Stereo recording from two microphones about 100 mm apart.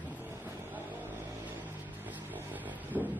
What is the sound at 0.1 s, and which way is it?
Vehicle, 15° right (ahead or behind).